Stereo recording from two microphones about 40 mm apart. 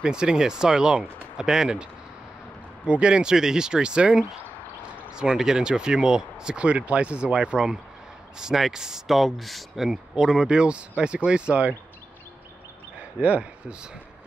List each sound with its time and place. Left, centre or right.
0.0 s speech: right
2.9 s speech: right
9.1 s speech: centre
9.8 s speech: centre
13.2 s speech: right